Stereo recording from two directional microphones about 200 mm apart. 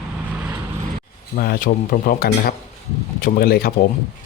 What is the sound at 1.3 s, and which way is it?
Speech, 45° left (ahead or behind).